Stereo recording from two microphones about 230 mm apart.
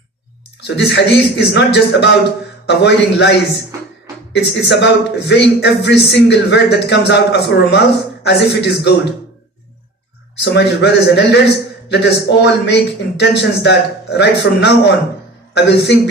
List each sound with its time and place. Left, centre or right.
0.8 s a man's voice: left
10.4 s a man's voice: left